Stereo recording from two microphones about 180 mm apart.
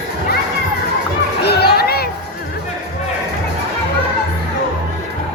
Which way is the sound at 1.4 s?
65° left (ahead or behind).